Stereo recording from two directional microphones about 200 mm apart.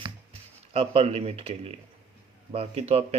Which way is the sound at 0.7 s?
30° right (ahead or behind).